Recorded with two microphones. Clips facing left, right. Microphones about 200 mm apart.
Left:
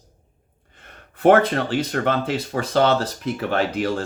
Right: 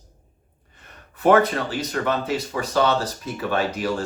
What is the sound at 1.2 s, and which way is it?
Speech, 55° left (ahead or behind).